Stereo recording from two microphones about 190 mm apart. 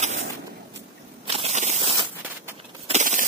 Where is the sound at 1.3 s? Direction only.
35° right (ahead or behind).